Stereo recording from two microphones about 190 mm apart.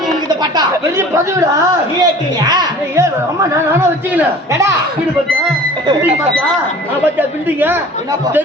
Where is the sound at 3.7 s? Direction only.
10° right (ahead or behind).